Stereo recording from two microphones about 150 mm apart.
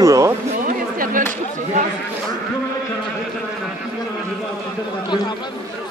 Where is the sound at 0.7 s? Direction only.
65° right (ahead or behind).